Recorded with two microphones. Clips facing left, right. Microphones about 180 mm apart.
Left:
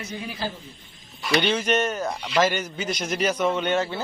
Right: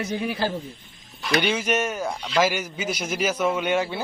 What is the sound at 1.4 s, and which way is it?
A man's voice, 10° right (ahead or behind).